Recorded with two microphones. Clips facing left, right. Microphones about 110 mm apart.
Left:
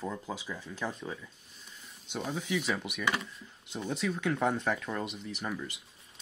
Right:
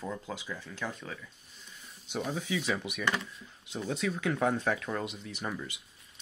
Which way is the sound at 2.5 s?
Centre (ahead or behind).